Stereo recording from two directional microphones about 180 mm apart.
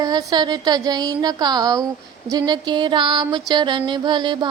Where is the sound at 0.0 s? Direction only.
20° right (ahead or behind).